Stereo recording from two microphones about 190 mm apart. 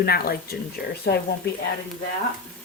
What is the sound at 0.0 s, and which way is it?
Speech, 55° left (ahead or behind).